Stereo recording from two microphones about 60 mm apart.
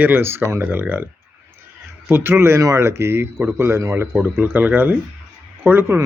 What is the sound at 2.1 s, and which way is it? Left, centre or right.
Speech, right.